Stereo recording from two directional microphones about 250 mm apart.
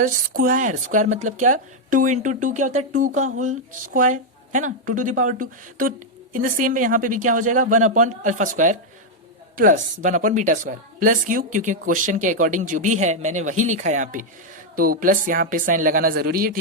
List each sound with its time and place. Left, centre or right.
0.0 s speech: right